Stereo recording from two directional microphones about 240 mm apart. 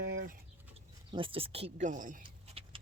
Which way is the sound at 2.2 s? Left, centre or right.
Right.